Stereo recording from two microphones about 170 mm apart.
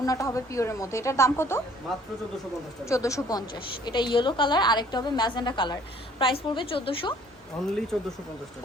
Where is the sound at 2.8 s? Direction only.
20° left (ahead or behind).